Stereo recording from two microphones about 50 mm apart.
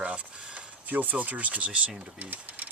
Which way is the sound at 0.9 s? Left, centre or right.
Right.